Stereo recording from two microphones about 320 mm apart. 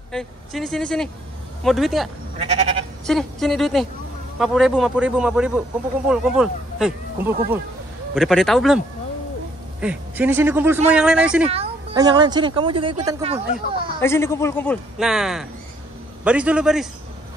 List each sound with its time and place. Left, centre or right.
0.1 s speech: centre
2.3 s sheep: centre
3.1 s speech: centre
11.4 s speech: centre
14.0 s speech: centre